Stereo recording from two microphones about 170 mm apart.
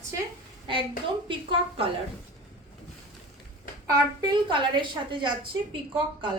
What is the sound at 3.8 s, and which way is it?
A woman's voice, 25° right (ahead or behind).